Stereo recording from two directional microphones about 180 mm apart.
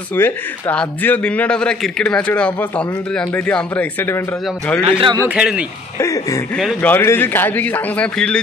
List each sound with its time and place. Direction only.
0.1 s a man's voice: 10° left (ahead or behind)
4.9 s a man's voice: 25° right (ahead or behind)
5.2 s a man's voice: 5° right (ahead or behind)
5.9 s a man's voice: 15° left (ahead or behind)